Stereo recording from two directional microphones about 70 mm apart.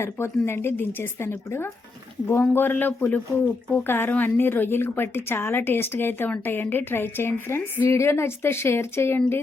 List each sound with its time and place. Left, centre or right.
0.0 s a woman's voice: left